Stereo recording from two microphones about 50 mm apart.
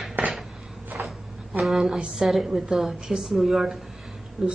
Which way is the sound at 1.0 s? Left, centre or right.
Right.